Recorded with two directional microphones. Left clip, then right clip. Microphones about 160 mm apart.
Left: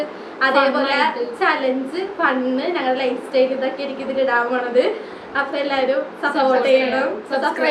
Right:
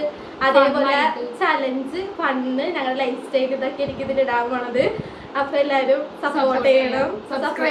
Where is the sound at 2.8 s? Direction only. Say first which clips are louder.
Left 3 dB; 20° right (ahead or behind).